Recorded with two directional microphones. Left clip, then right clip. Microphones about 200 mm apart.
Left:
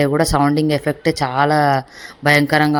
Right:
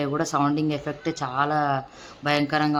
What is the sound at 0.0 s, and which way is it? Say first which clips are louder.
Speech: left 8 dB; 30° left (ahead or behind).